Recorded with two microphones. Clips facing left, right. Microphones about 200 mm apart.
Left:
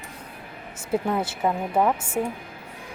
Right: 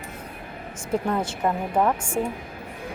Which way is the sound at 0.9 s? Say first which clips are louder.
Even; 5° left (ahead or behind).